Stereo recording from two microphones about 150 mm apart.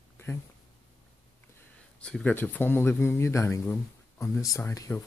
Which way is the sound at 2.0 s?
5° left (ahead or behind).